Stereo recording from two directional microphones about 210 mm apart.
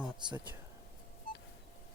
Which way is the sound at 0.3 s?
20° right (ahead or behind).